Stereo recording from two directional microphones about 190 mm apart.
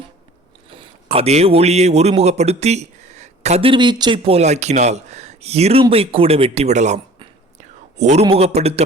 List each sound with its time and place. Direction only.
0.7 s a man's voice: 30° right (ahead or behind)